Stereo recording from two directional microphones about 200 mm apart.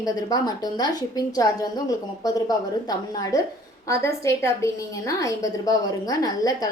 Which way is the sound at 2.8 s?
20° left (ahead or behind).